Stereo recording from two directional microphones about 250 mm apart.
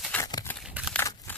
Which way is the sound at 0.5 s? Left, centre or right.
Centre.